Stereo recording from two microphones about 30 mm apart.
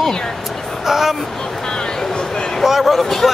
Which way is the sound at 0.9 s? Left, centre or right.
Centre.